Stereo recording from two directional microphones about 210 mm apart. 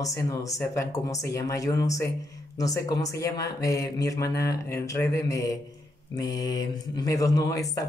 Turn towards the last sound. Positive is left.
turn(degrees=15)  # may be behind; listen again after turning